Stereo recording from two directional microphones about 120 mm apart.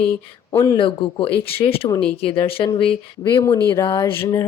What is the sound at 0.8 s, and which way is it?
A woman's voice, 45° left (ahead or behind).